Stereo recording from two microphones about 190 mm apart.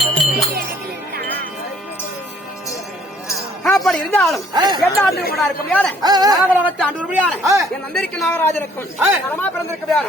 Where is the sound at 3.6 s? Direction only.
Centre (ahead or behind).